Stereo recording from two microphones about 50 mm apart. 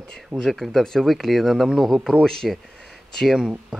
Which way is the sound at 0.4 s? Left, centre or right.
Centre.